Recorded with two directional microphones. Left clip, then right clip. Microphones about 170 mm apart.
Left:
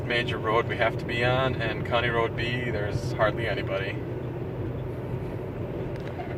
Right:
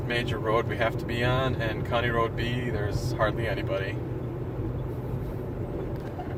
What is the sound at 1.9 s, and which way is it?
Speech, 70° right (ahead or behind).